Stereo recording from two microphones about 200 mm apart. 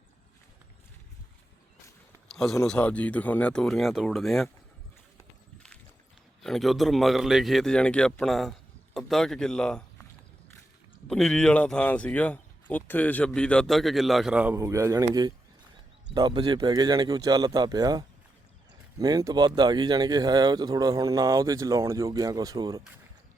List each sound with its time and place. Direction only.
2.3 s speech: centre (ahead or behind)
6.4 s speech: centre (ahead or behind)
11.1 s speech: 5° left (ahead or behind); by 22.8 s 20° right (ahead or behind)